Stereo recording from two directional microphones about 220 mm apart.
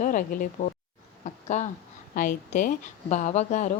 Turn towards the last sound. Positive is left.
turn(degrees=35)  # may be behind; listen again after turning